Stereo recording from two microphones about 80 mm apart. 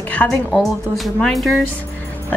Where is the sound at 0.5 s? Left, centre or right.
Centre.